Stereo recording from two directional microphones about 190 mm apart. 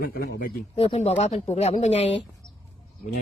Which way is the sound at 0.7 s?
35° left (ahead or behind).